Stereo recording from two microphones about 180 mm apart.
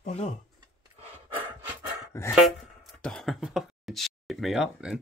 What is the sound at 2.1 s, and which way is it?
Speech, 15° left (ahead or behind).